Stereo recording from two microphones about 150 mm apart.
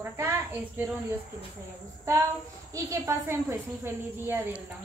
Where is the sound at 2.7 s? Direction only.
20° right (ahead or behind).